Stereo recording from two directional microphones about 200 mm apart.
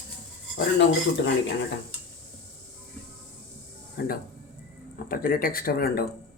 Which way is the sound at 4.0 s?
50° left (ahead or behind).